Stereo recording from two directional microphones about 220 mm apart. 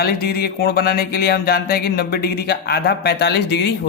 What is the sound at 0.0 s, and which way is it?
A man's voice, 45° left (ahead or behind).